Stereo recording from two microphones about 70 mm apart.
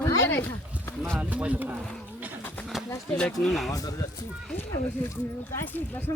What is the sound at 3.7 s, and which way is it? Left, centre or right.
Speech, left.